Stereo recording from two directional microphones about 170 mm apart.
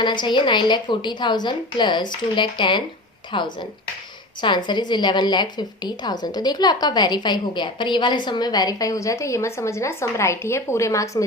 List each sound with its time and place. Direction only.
0.0 s a woman's voice: 25° left (ahead or behind)